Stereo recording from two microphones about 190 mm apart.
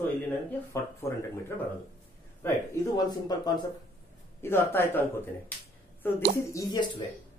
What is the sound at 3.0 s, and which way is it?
Speech, 20° left (ahead or behind).